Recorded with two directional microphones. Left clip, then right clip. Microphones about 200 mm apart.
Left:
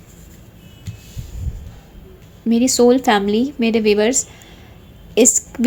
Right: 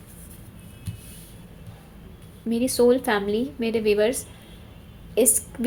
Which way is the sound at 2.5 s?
15° left (ahead or behind).